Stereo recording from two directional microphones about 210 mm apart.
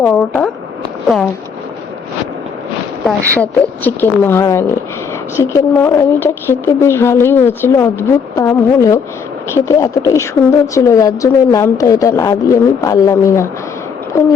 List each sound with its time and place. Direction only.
0.0 s speech: 5° left (ahead or behind)
3.1 s speech: 5° left (ahead or behind)